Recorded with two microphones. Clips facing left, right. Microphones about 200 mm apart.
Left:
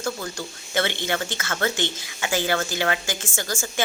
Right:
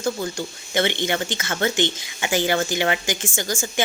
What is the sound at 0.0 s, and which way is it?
A woman's voice, 20° right (ahead or behind).